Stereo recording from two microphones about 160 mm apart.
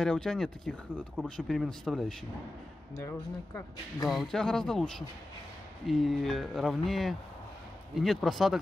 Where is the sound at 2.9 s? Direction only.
15° left (ahead or behind).